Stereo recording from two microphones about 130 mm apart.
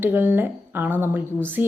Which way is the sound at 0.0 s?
15° right (ahead or behind).